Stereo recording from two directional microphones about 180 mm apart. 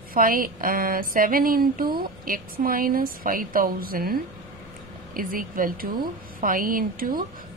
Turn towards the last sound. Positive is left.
turn(degrees=-50)  # may be behind; listen again after turning